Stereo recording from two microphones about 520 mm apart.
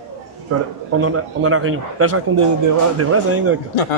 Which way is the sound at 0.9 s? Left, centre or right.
Right.